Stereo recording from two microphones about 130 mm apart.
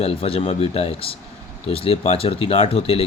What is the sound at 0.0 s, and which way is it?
Speech, 45° left (ahead or behind).